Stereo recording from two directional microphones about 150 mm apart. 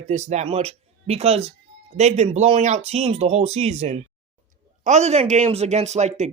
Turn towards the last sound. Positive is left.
turn(degrees=-50)  # may be behind; listen again after turning